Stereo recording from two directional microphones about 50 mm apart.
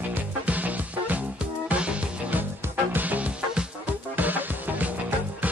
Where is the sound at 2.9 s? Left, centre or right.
Right.